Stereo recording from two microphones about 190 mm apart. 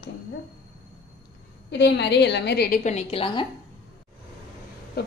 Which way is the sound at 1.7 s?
65° left (ahead or behind).